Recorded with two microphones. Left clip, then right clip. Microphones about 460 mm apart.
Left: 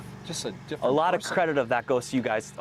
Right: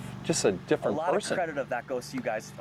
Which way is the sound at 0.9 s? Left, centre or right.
Left.